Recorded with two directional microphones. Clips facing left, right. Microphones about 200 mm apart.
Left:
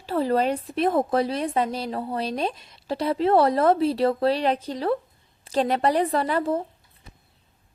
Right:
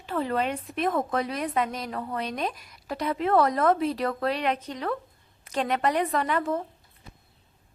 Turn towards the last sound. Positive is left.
turn(degrees=30)  # may be behind; listen again after turning